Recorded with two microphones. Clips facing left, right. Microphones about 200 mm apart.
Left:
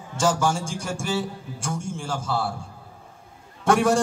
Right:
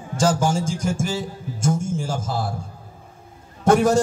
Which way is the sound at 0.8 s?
40° right (ahead or behind).